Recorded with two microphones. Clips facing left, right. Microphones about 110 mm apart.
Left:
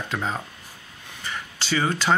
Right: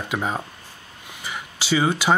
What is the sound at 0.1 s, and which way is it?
Speech, 10° right (ahead or behind).